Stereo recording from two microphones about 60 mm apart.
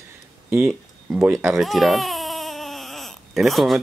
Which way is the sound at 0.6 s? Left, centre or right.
Centre.